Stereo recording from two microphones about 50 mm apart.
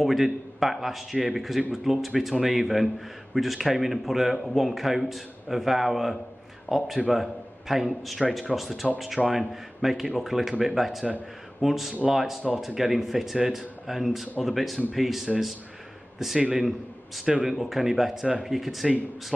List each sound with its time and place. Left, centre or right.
0.0 s a man's voice: centre
16.3 s a man's voice: centre
16.6 s a man's voice: centre